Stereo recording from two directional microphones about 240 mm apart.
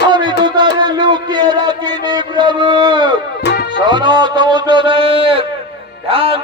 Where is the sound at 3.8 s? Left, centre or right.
Centre.